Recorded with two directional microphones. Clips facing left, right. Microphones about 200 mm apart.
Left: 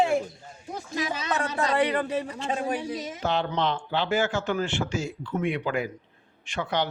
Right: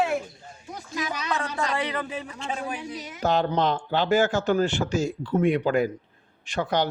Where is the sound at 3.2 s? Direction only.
40° right (ahead or behind).